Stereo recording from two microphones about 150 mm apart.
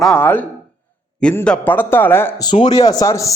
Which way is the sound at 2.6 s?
25° left (ahead or behind).